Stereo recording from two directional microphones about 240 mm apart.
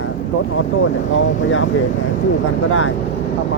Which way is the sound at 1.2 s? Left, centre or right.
Left.